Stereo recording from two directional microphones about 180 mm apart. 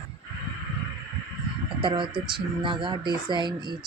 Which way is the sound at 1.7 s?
25° right (ahead or behind).